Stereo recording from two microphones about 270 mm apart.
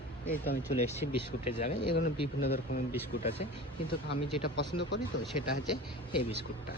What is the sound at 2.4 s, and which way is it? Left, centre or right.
Speech, left.